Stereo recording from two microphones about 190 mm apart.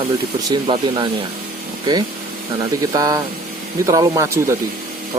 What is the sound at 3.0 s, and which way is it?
Speech, 20° right (ahead or behind).